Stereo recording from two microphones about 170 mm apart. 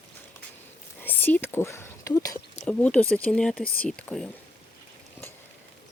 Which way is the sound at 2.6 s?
5° left (ahead or behind).